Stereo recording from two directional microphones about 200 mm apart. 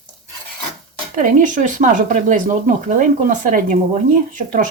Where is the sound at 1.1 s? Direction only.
40° right (ahead or behind).